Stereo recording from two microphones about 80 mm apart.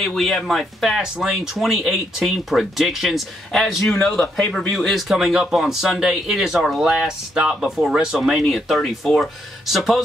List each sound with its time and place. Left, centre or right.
0.0 s speech: centre